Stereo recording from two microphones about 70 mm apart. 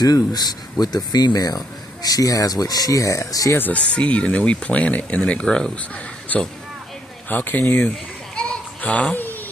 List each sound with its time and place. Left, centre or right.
0.0 s speech: left
3.5 s speech: left
6.3 s speech: left
8.4 s a sound: centre